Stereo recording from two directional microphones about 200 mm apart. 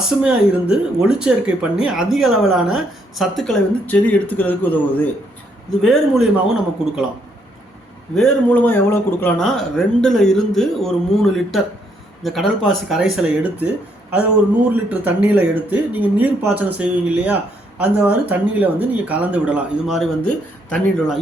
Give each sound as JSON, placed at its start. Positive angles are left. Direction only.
{"t": 0.2, "sound": "speech", "side_deg": -5}
{"t": 8.1, "sound": "speech", "side_deg": 5}
{"t": 14.7, "sound": "speech", "side_deg": -10}